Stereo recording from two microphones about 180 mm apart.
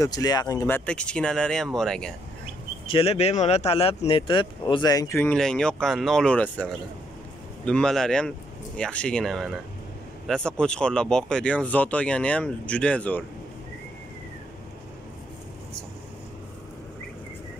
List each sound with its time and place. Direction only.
0.0 s speech: 20° left (ahead or behind); by 2.1 s 5° left (ahead or behind)
2.9 s speech: 35° left (ahead or behind); by 13.2 s 5° left (ahead or behind)